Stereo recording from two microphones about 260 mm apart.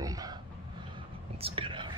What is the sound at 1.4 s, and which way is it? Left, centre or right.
Whispering, right.